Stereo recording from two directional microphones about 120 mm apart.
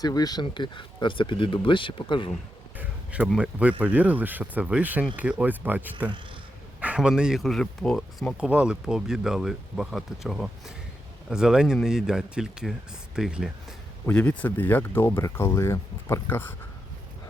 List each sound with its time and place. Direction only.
0.0 s speech: 35° left (ahead or behind)
2.7 s a sound: 10° right (ahead or behind)
3.3 s speech: 10° right (ahead or behind)
8.4 s speech: 10° right (ahead or behind)
14.1 s speech: 10° left (ahead or behind)